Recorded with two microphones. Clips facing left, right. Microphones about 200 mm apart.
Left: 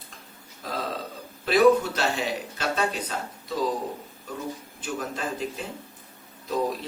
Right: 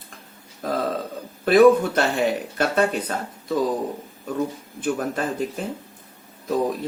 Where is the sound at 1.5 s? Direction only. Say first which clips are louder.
Right 5 dB; 55° right (ahead or behind).